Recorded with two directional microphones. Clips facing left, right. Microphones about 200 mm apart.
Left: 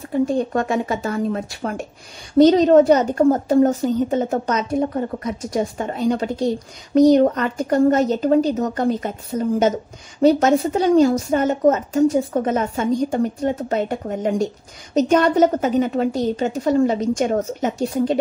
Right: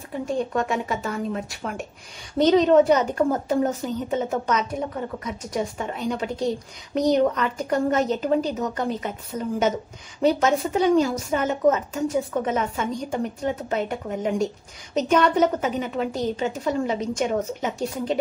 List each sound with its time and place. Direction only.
0.5 s a woman's voice: 40° left (ahead or behind)
10.2 s a woman's voice: 35° left (ahead or behind)